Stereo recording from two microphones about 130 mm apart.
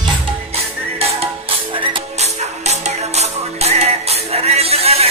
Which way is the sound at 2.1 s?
60° right (ahead or behind).